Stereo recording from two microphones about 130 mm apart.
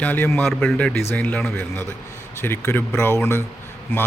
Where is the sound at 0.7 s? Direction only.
15° left (ahead or behind).